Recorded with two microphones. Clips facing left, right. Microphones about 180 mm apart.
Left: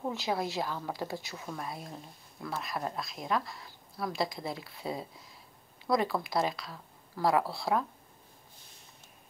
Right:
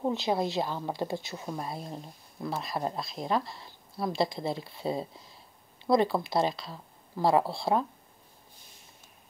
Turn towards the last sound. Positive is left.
turn(degrees=-25)  # may be behind; listen again after turning